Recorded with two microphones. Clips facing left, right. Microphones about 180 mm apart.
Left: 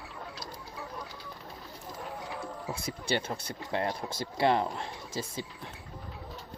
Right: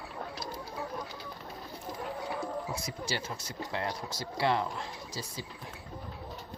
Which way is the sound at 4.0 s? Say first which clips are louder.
Left 3 dB; 55° left (ahead or behind).